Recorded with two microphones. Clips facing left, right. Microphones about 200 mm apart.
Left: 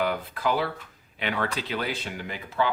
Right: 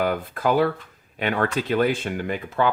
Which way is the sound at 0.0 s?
45° right (ahead or behind).